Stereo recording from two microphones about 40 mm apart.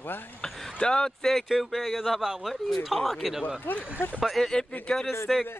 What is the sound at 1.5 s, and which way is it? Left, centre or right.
Speech, centre.